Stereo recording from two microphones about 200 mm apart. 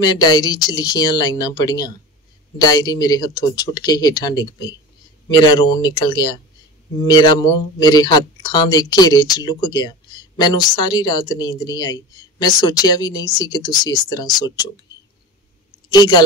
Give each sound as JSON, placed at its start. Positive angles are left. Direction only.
{"t": 0.0, "sound": "speech", "side_deg": 20}
{"t": 15.9, "sound": "a woman's voice", "side_deg": 20}